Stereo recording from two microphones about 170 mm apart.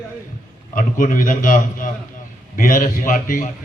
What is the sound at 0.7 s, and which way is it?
A man's voice, 55° left (ahead or behind).